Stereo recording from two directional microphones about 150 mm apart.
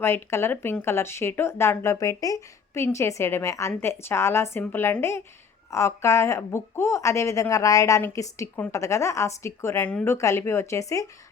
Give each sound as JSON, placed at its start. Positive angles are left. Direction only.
{"t": 0.0, "sound": "speech", "side_deg": 15}